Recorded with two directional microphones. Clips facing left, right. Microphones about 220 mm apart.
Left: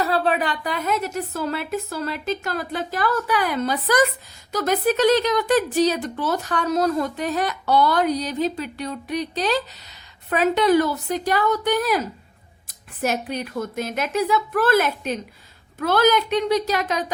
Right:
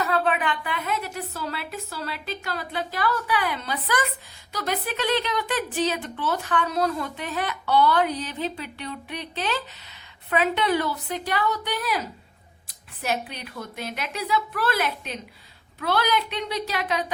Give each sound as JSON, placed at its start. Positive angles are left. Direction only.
{"t": 0.0, "sound": "a woman's voice", "side_deg": 35}